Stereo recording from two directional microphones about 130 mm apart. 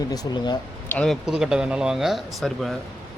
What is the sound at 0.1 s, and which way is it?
Speech, 30° left (ahead or behind).